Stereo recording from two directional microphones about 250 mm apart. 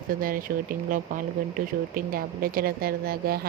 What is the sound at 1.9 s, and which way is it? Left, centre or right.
Speech, right.